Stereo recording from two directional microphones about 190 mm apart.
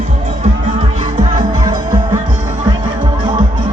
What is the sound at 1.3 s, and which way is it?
Music, 20° right (ahead or behind).